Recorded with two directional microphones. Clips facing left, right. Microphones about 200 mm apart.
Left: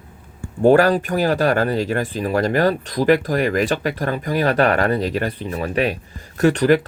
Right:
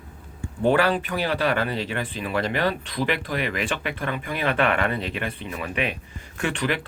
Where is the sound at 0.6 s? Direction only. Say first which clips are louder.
Left 7 dB; 40° left (ahead or behind).